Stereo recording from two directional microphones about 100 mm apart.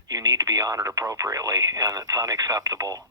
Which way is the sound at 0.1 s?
40° right (ahead or behind).